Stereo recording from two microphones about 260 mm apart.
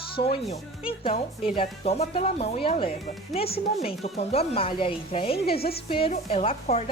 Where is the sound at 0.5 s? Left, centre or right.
Left.